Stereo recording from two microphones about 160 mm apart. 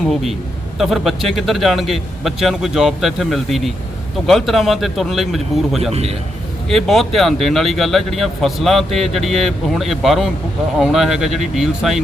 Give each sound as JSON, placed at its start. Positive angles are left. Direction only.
{"t": 0.1, "sound": "speech", "side_deg": 0}
{"t": 5.9, "sound": "a man's voice", "side_deg": -40}
{"t": 6.7, "sound": "speech", "side_deg": 0}